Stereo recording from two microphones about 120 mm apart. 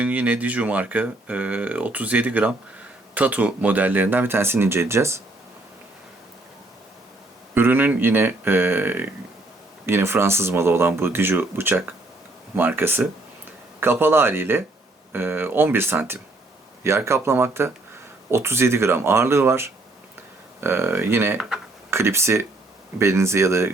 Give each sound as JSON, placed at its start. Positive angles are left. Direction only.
{"t": 0.0, "sound": "speech", "side_deg": -10}
{"t": 7.5, "sound": "speech", "side_deg": -15}